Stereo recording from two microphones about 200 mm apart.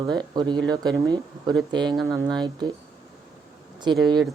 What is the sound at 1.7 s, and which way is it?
Speech, 20° right (ahead or behind).